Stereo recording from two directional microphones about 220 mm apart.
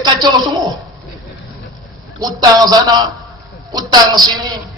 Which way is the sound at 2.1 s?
15° right (ahead or behind).